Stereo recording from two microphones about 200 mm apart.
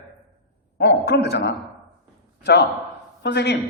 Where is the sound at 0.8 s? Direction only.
50° left (ahead or behind).